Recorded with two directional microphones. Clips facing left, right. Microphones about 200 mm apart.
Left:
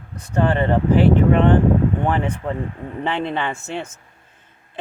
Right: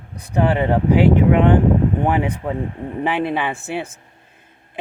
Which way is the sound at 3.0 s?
10° right (ahead or behind).